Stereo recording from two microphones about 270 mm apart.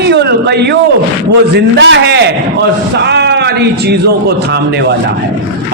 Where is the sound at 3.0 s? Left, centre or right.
Right.